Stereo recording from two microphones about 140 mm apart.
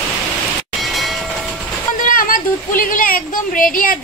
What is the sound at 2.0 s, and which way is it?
Speech, 85° left.